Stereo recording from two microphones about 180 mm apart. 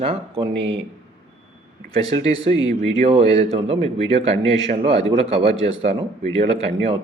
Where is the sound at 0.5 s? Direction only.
75° right (ahead or behind).